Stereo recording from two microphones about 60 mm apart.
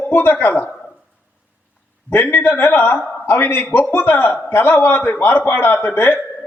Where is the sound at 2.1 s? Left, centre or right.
Left.